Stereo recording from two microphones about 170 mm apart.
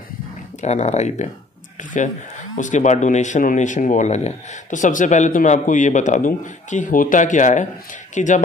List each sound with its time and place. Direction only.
0.6 s speech: 40° left (ahead or behind)
2.5 s speech: 45° left (ahead or behind)